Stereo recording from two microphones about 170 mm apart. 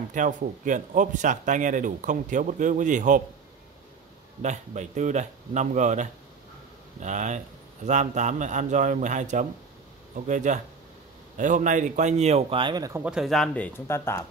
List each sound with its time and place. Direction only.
0.1 s speech: 50° right (ahead or behind)
4.4 s a man's voice: 45° right (ahead or behind); by 13.0 s 20° right (ahead or behind)
13.0 s speech: centre (ahead or behind)
13.7 s speech: 15° left (ahead or behind)